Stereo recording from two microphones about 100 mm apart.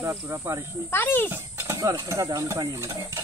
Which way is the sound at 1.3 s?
25° right (ahead or behind).